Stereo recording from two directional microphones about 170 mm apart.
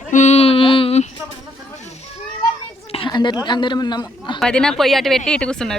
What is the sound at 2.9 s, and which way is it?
Speech, 30° left (ahead or behind).